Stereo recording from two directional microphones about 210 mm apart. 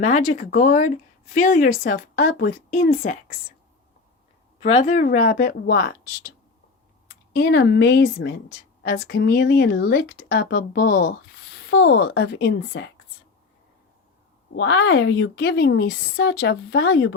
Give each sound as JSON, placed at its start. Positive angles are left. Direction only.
{"t": 0.0, "sound": "a woman's voice", "side_deg": 35}
{"t": 4.9, "sound": "a woman's voice", "side_deg": 40}
{"t": 7.3, "sound": "a woman's voice", "side_deg": 55}
{"t": 12.0, "sound": "speech", "side_deg": 60}
{"t": 14.5, "sound": "a woman's voice", "side_deg": 55}